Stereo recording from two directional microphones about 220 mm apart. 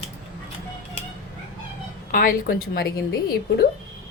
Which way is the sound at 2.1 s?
40° left (ahead or behind).